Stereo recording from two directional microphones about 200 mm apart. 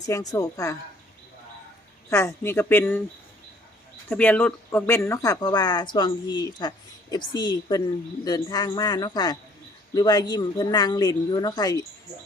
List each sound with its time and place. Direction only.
0.0 s speech: 20° left (ahead or behind)
2.0 s speech: 15° left (ahead or behind)
4.1 s speech: 10° left (ahead or behind)